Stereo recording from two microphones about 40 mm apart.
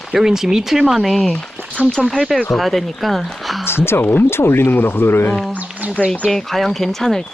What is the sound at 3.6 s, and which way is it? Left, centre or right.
Speech, left.